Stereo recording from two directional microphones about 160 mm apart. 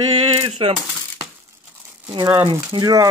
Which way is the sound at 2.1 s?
25° right (ahead or behind).